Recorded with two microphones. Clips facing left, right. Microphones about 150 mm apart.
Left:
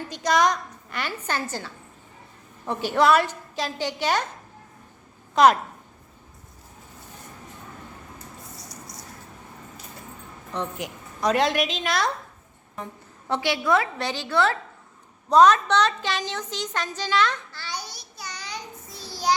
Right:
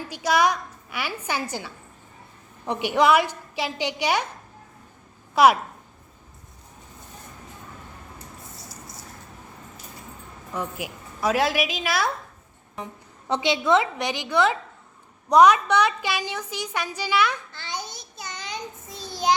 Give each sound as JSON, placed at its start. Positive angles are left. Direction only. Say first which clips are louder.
{"t": 0.1, "sound": "a woman's voice", "louder": "even", "side_deg": -5}
{"t": 5.3, "sound": "a woman's voice", "louder": "even", "side_deg": -10}
{"t": 10.5, "sound": "a woman's voice", "louder": "even", "side_deg": -5}
{"t": 12.7, "sound": "a woman's voice", "louder": "even", "side_deg": -15}
{"t": 17.5, "sound": "child singing", "louder": "right 1 dB", "side_deg": -20}